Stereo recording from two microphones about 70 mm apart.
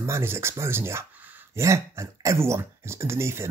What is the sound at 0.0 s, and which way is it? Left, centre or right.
Speech, right.